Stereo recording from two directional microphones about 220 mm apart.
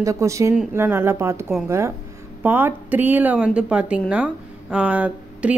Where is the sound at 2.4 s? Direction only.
10° right (ahead or behind).